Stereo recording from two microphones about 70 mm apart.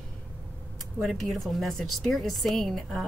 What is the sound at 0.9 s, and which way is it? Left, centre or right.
A woman's voice, centre.